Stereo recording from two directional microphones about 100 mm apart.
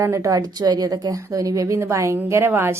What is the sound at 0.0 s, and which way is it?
A woman's voice, 30° right (ahead or behind).